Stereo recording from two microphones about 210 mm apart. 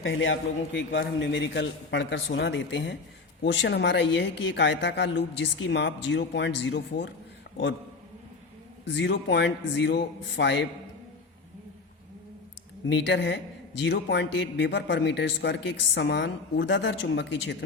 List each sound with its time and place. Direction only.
0.0 s a man's voice: 65° left (ahead or behind)
8.8 s a man's voice: 60° left (ahead or behind)
12.9 s a man's voice: 55° left (ahead or behind)